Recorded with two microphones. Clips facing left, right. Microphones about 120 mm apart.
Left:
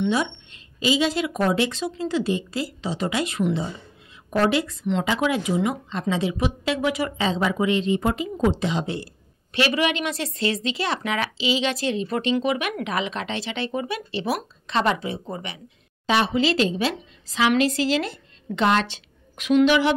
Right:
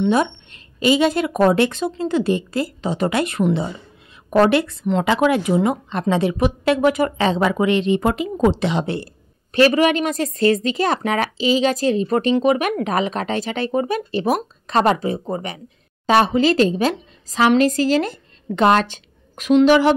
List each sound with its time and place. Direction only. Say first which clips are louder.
0.1 s a woman's voice: right 6 dB; 55° right (ahead or behind)